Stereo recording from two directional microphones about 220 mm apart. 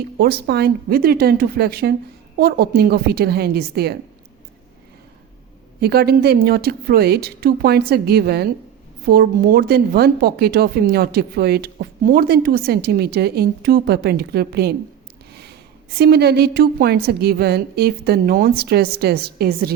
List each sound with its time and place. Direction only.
0.2 s a woman's voice: 45° right (ahead or behind)
5.8 s a woman's voice: 45° right (ahead or behind)
15.3 s snort: 50° right (ahead or behind)
16.0 s a woman's voice: 45° right (ahead or behind)